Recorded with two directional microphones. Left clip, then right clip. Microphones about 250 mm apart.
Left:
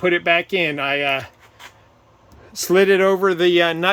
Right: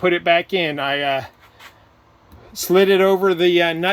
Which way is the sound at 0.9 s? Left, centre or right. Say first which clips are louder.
Even; left.